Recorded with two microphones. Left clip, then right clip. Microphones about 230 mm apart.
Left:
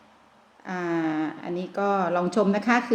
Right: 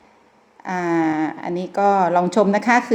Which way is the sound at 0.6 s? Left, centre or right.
Right.